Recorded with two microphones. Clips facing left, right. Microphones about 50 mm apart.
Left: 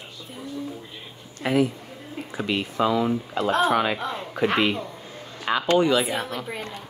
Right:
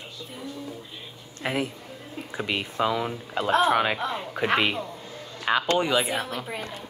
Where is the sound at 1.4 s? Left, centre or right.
Centre.